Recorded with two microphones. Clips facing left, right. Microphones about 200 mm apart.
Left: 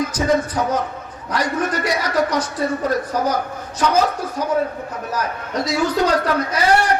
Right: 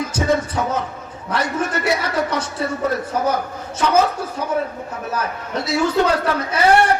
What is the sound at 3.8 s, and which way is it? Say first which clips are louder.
A man's voice: right 1 dB; 25° right (ahead or behind).